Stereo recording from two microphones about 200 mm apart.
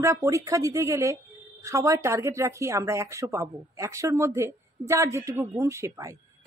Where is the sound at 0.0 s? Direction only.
15° right (ahead or behind).